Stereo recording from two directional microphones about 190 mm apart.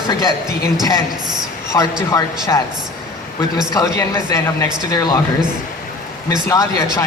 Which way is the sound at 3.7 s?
15° left (ahead or behind).